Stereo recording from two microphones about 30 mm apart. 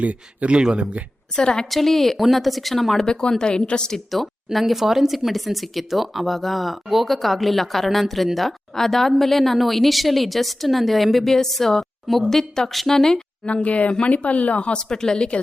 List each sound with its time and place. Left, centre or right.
0.0 s a man's voice: right
0.5 s speech: right
1.4 s a woman's voice: left
1.7 s a woman's voice: centre
3.0 s a woman's voice: left
4.5 s a woman's voice: centre
13.4 s speech: left
14.8 s a woman's voice: left